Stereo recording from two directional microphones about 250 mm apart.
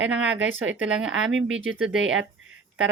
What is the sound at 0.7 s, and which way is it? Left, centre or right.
Speech, centre.